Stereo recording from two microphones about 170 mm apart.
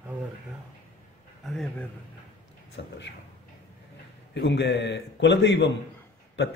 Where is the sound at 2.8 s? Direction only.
90° left.